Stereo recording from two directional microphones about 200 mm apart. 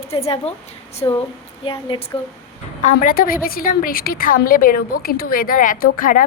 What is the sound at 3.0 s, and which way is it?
A woman's voice, 45° left (ahead or behind).